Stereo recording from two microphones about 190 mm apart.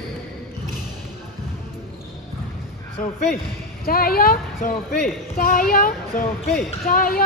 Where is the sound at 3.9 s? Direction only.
50° left (ahead or behind).